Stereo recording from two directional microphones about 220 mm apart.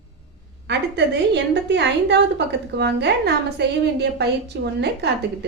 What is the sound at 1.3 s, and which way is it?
A woman's voice, 50° right (ahead or behind).